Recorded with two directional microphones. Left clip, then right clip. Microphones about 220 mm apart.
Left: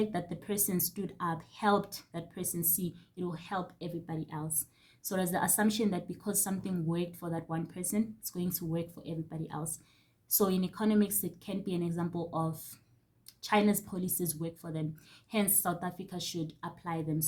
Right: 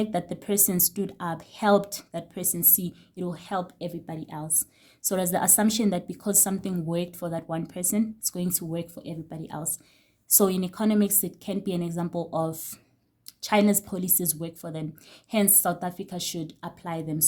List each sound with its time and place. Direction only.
0.0 s a woman's voice: 45° right (ahead or behind)